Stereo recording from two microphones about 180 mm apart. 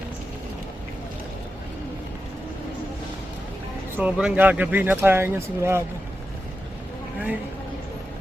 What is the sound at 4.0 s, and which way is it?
Speech, 5° right (ahead or behind).